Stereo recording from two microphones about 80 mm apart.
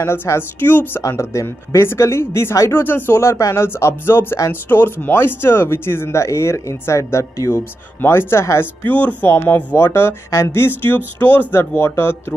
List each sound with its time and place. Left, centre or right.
0.0 s speech: left
1.0 s speech: left
8.8 s speech: left